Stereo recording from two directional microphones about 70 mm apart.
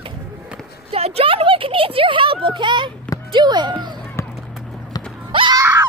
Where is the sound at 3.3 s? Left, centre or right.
Right.